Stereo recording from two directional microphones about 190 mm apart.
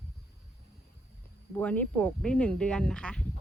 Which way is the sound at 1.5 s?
10° left (ahead or behind).